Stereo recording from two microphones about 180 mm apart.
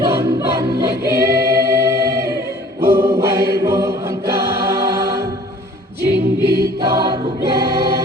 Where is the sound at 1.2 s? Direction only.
15° right (ahead or behind).